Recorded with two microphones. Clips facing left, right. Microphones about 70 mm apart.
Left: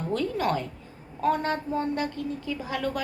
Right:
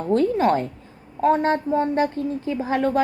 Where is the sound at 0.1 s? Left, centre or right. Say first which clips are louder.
Right 9 dB; right.